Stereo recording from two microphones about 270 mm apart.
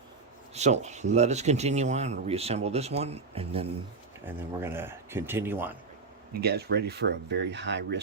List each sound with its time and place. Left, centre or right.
0.5 s speech: right
4.3 s speech: centre
6.3 s speech: right